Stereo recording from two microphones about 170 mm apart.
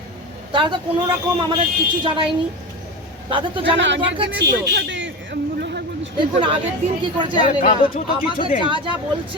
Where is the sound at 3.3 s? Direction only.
30° right (ahead or behind).